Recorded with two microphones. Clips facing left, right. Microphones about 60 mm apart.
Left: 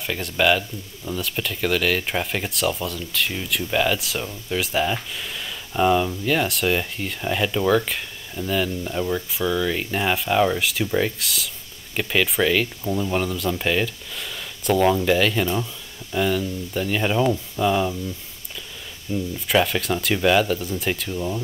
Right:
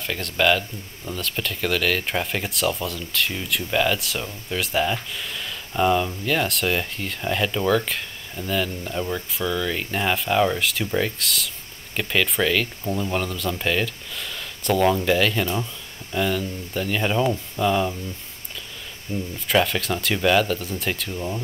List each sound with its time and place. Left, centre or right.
0.0 s speech: centre
19.1 s speech: right
19.4 s speech: centre